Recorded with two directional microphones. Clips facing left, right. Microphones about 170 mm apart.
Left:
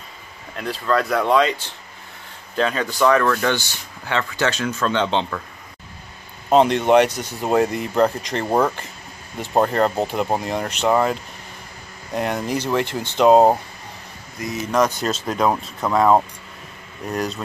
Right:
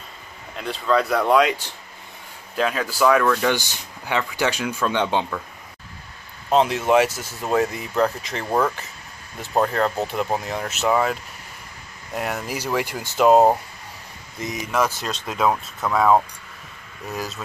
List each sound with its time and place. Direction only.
0.6 s speech: centre (ahead or behind)
6.5 s speech: centre (ahead or behind)
8.5 s speech: 15° left (ahead or behind)
9.6 s speech: centre (ahead or behind)
12.4 s speech: 10° right (ahead or behind)
14.7 s speech: 5° right (ahead or behind)